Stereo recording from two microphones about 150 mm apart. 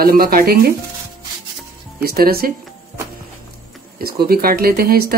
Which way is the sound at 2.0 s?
90° right.